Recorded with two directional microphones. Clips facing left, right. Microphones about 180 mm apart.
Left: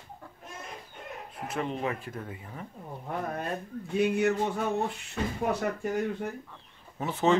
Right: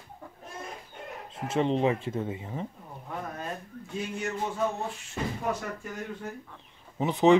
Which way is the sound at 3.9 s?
65° left (ahead or behind).